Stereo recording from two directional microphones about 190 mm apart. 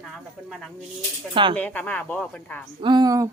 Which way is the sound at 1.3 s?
25° right (ahead or behind).